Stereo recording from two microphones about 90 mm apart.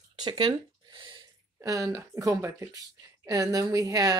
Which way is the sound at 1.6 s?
40° right (ahead or behind).